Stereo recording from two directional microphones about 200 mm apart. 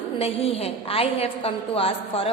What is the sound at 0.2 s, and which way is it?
A woman's voice, 30° left (ahead or behind).